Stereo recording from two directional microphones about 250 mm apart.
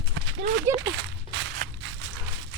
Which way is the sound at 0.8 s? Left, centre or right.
Right.